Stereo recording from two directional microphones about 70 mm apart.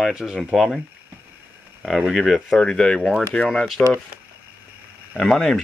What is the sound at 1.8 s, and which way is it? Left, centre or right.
Speech, centre.